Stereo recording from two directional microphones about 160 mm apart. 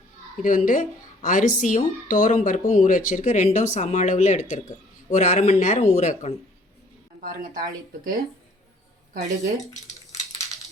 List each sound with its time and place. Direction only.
0.4 s a woman's voice: 55° left (ahead or behind)
7.2 s speech: 60° right (ahead or behind)
9.6 s a sound: 20° left (ahead or behind)